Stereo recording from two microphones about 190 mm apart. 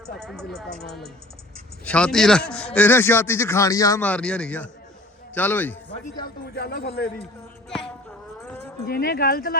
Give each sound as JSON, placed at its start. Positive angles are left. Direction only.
{"t": 0.2, "sound": "a man's voice", "side_deg": 5}
{"t": 6.2, "sound": "speech", "side_deg": 60}
{"t": 8.4, "sound": "a sound", "side_deg": 10}
{"t": 8.9, "sound": "speech", "side_deg": 50}